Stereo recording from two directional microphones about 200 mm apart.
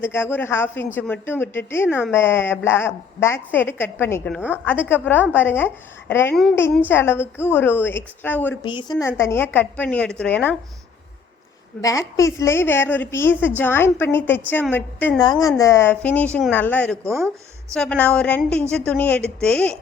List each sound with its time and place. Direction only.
0.0 s a woman's voice: 10° left (ahead or behind)
8.6 s a woman's voice: 20° left (ahead or behind)
11.8 s a woman's voice: 15° left (ahead or behind)
15.2 s a woman's voice: 20° left (ahead or behind); by 19.8 s 5° left (ahead or behind)